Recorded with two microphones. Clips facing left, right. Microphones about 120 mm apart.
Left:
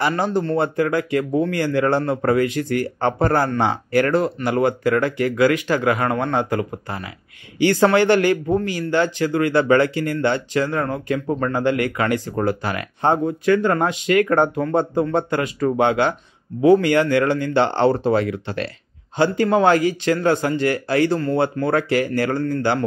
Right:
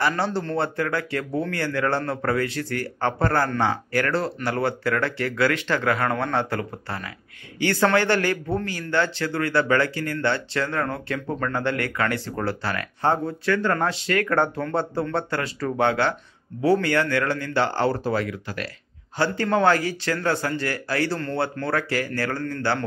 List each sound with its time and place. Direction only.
0.6 s speech: 15° left (ahead or behind)
19.1 s speech: 15° left (ahead or behind)